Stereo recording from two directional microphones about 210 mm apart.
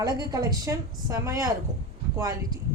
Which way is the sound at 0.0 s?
20° right (ahead or behind).